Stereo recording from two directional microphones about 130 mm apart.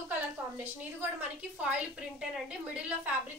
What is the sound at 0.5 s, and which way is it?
A woman's voice, 15° right (ahead or behind).